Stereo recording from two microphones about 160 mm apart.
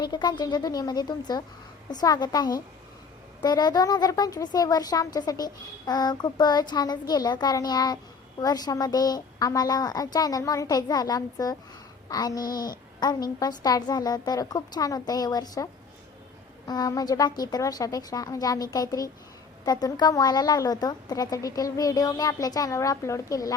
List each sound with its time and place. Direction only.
0.0 s a woman's voice: 25° left (ahead or behind)